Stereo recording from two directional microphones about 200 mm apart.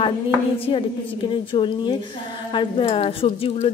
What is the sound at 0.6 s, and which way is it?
A woman's voice, 25° left (ahead or behind).